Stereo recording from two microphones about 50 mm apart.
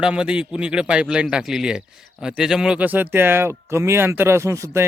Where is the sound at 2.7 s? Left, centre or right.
Right.